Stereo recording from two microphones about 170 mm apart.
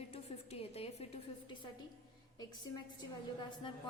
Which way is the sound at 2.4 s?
25° left (ahead or behind).